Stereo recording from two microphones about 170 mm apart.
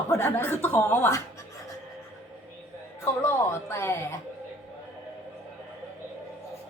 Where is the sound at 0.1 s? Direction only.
15° left (ahead or behind).